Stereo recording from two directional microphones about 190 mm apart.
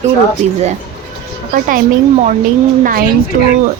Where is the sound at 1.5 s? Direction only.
50° right (ahead or behind).